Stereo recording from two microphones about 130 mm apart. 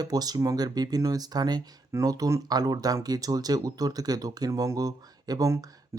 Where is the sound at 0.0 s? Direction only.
30° right (ahead or behind).